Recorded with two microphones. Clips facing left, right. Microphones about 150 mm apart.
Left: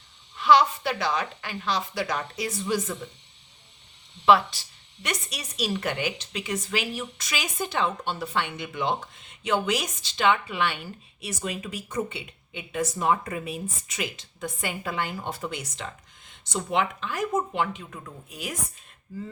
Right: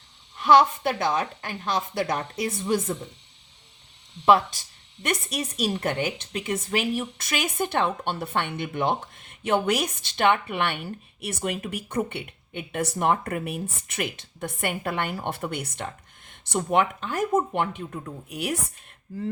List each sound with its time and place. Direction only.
0.3 s a woman's voice: 50° right (ahead or behind)
4.3 s a woman's voice: 45° right (ahead or behind)
18.3 s a woman's voice: 65° right (ahead or behind)